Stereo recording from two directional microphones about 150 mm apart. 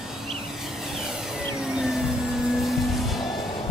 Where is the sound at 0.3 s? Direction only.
Centre (ahead or behind).